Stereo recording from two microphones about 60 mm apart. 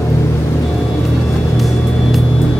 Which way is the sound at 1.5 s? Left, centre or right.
Centre.